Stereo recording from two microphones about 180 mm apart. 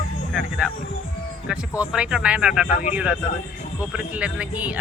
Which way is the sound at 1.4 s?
5° right (ahead or behind).